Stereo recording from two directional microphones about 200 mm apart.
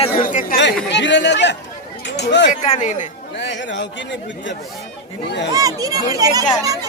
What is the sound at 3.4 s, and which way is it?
Speech, 65° left (ahead or behind).